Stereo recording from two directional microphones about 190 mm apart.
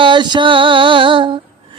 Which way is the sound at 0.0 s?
25° right (ahead or behind).